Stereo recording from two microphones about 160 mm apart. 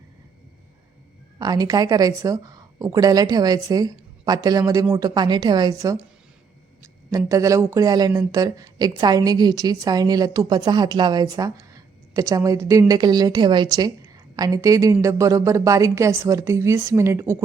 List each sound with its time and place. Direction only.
1.4 s speech: 25° right (ahead or behind)